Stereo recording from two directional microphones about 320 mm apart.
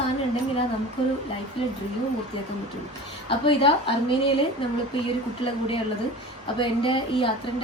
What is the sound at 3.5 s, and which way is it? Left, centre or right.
Speech, centre.